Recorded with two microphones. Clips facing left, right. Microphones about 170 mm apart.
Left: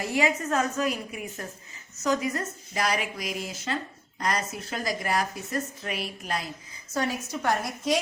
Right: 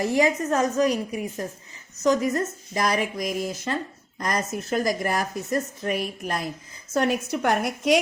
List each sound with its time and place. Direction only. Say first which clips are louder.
0.0 s a woman's voice: right 5 dB; 40° right (ahead or behind)
2.7 s speech: right 4 dB; 45° right (ahead or behind)
6.9 s a woman's voice: right 6 dB; 65° right (ahead or behind)